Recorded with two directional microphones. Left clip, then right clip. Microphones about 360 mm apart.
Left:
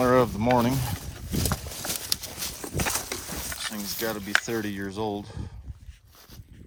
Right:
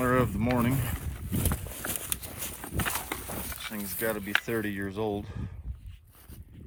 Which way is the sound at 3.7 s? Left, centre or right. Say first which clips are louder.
Even; centre.